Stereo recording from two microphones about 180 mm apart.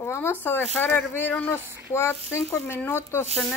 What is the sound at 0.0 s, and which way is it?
Speech, 15° left (ahead or behind).